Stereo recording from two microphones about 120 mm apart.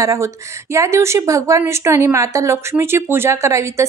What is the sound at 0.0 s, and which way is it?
A woman's voice, 25° right (ahead or behind).